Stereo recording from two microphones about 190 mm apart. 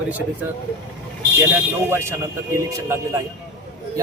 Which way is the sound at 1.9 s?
15° right (ahead or behind).